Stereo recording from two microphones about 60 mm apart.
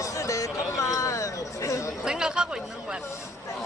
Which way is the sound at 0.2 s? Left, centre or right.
Left.